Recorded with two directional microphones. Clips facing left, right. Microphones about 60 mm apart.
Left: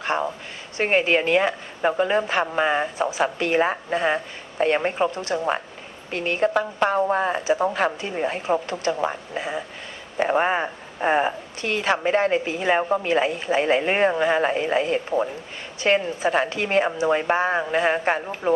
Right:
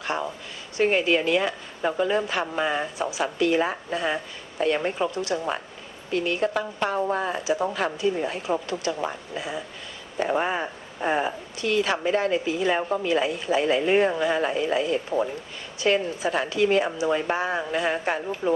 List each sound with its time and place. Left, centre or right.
0.0 s speech: left